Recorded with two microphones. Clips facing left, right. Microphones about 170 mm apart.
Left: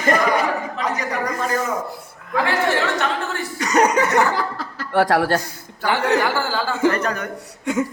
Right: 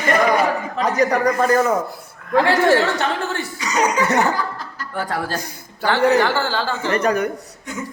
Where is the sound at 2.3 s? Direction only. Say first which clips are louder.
Right 5 dB; 30° right (ahead or behind).